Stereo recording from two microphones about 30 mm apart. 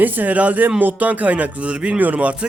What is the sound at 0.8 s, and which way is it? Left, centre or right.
Speech, right.